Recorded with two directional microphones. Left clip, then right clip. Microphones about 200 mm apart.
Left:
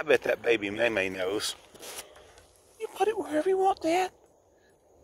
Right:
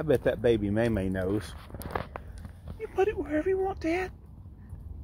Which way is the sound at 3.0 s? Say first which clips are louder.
Even; 20° left (ahead or behind).